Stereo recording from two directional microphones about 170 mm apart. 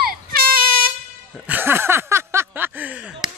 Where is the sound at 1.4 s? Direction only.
10° right (ahead or behind).